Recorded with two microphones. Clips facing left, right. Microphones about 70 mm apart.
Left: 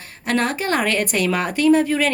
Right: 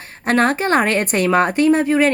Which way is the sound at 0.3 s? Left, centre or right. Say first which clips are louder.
Right 5 dB; right.